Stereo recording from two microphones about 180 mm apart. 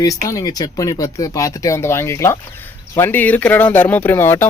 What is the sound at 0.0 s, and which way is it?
Speech, 20° left (ahead or behind).